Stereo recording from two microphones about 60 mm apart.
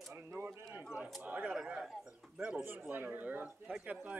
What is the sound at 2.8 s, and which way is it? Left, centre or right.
Speech, right.